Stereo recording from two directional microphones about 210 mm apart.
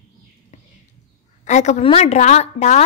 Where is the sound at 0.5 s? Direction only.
35° left (ahead or behind).